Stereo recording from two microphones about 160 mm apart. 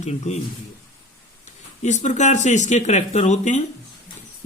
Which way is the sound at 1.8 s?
45° left (ahead or behind).